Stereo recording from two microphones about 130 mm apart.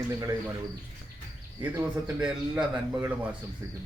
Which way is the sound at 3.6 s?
25° right (ahead or behind).